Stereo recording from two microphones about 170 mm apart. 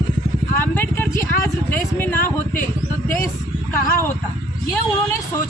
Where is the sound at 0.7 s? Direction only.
10° left (ahead or behind).